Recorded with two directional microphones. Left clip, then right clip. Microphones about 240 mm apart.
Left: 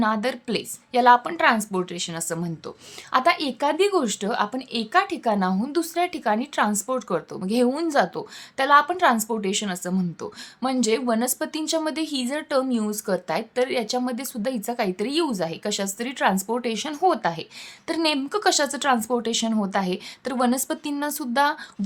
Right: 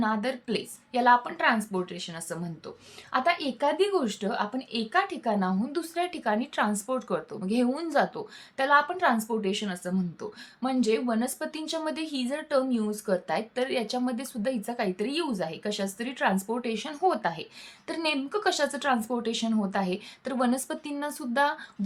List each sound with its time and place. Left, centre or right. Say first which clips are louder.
0.0 s a woman's voice: left 5 dB; left